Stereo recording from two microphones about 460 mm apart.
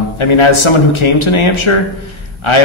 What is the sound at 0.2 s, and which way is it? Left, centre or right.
A man's voice, left.